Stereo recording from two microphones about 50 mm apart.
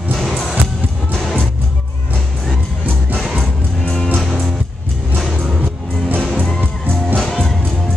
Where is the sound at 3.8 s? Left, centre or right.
Centre.